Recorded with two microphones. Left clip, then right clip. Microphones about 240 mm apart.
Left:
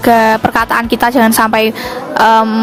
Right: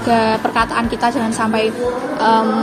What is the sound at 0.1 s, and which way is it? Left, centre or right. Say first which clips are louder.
A woman's voice: left 6 dB; left.